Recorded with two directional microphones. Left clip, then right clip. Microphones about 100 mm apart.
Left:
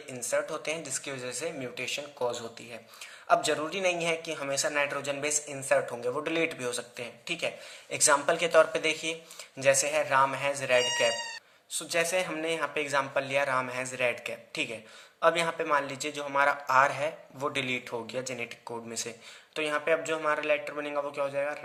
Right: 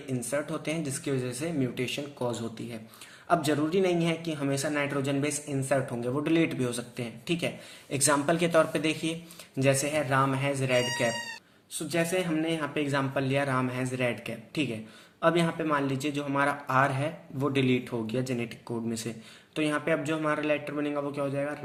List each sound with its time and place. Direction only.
0.1 s a man's voice: 20° left (ahead or behind)